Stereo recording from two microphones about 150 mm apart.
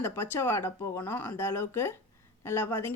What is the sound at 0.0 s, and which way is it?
Speech, 15° left (ahead or behind).